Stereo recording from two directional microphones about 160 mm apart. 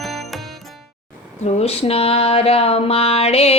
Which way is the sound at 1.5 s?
40° left (ahead or behind).